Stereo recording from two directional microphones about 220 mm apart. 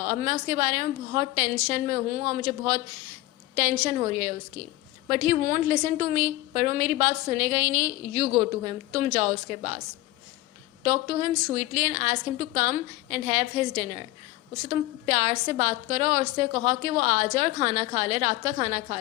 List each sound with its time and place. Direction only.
0.0 s a woman's voice: 35° right (ahead or behind)
10.8 s a woman's voice: 35° right (ahead or behind)